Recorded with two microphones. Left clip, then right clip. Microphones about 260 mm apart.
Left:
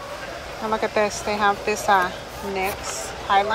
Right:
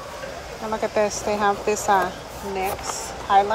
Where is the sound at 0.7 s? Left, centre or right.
Centre.